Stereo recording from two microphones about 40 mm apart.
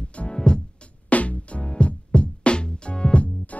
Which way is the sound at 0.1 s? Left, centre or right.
Left.